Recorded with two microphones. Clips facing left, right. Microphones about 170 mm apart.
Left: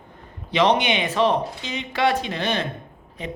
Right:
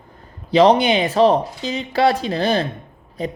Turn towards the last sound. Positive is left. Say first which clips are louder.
# right 6 dB
turn(degrees=-35)  # may be behind; listen again after turning